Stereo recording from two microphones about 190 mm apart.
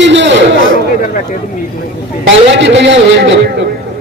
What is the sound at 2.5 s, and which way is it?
Speech, 75° right (ahead or behind).